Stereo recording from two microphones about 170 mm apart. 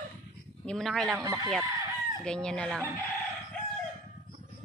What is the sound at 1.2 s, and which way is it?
Speech, 20° right (ahead or behind).